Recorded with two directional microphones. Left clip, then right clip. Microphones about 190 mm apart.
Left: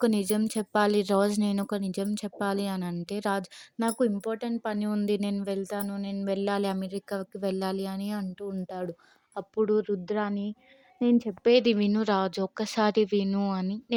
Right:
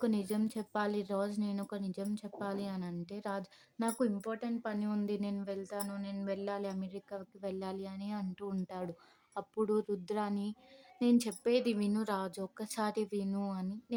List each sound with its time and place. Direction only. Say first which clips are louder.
0.0 s speech: left 9 dB; 40° left (ahead or behind)
8.2 s speech: left 6 dB; 20° left (ahead or behind)